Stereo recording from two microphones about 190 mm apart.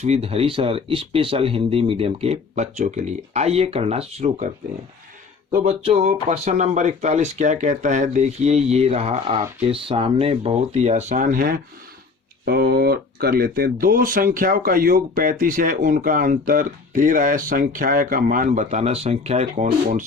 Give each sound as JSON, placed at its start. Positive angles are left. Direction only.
{"t": 0.0, "sound": "speech", "side_deg": -35}
{"t": 5.6, "sound": "speech", "side_deg": -30}